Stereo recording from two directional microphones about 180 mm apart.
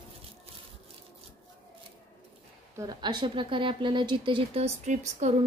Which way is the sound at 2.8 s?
20° right (ahead or behind).